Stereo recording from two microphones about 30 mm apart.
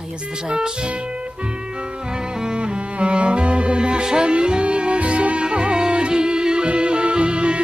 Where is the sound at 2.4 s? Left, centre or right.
Right.